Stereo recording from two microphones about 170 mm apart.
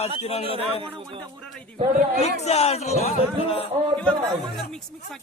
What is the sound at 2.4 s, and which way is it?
Speech, 40° left (ahead or behind).